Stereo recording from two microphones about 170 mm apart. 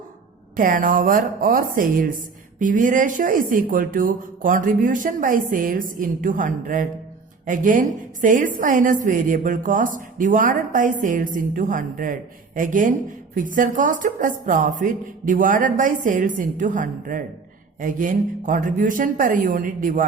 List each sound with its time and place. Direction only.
0.5 s a woman's voice: 55° right (ahead or behind)